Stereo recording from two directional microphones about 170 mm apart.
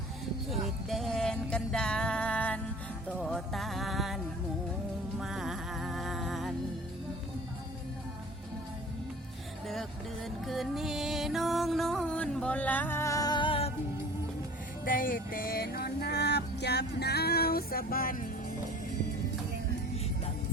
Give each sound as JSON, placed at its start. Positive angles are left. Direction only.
{"t": 0.9, "sound": "music", "side_deg": 0}
{"t": 5.2, "sound": "music", "side_deg": 0}
{"t": 10.2, "sound": "music", "side_deg": 0}
{"t": 14.8, "sound": "music", "side_deg": 55}